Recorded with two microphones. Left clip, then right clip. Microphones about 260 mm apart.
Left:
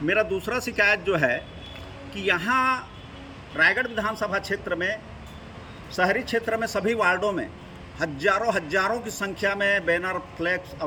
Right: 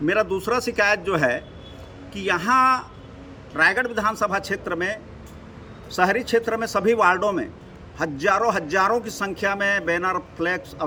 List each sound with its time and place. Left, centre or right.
0.0 s a man's voice: centre
6.0 s a man's voice: centre